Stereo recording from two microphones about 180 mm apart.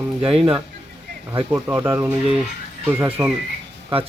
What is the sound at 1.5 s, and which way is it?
Speech, 15° right (ahead or behind).